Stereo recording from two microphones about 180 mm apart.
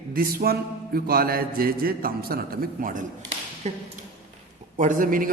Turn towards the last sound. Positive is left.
turn(degrees=-50)  # may be behind; listen again after turning